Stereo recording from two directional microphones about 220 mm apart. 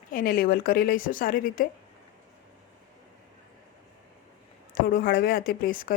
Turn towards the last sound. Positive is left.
turn(degrees=40)  # may be behind; listen again after turning